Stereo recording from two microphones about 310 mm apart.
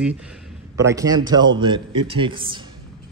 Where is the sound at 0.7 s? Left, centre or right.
Centre.